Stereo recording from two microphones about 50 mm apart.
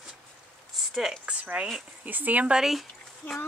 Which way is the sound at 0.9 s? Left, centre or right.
Centre.